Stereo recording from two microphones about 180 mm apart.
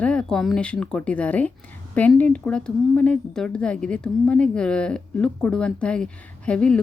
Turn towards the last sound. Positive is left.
turn(degrees=5)  # may be behind; listen again after turning